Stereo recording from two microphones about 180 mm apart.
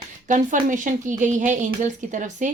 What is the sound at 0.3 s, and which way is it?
A woman's voice, 45° right (ahead or behind).